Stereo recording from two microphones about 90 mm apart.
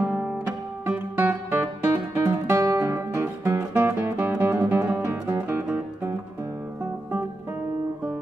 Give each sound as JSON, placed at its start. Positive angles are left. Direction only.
{"t": 0.0, "sound": "music", "side_deg": -20}
{"t": 0.8, "sound": "guitar", "side_deg": -20}